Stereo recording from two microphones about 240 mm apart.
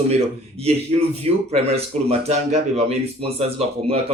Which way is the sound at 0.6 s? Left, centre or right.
Right.